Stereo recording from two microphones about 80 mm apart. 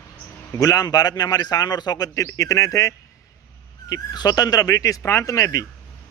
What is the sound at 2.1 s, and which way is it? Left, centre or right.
Speech, left.